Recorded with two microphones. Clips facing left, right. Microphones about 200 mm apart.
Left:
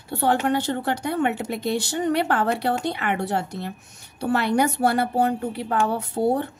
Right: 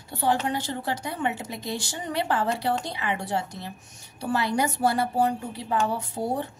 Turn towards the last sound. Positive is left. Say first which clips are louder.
# left 6 dB
turn(degrees=60)  # may be behind; listen again after turning